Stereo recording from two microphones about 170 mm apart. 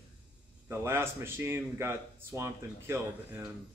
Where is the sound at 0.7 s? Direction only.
15° right (ahead or behind).